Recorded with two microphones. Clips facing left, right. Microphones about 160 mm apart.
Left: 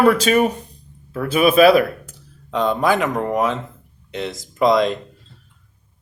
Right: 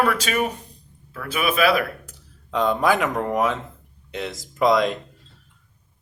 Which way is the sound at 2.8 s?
10° right (ahead or behind).